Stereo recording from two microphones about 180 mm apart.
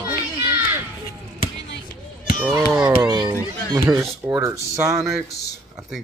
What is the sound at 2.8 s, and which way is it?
Speech, 20° right (ahead or behind).